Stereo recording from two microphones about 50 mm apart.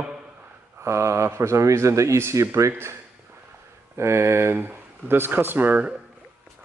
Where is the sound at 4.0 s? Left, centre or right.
Right.